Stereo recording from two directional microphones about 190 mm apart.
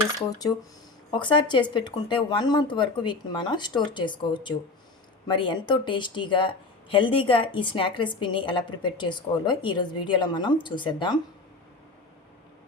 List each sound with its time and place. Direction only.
1.1 s speech: 25° left (ahead or behind)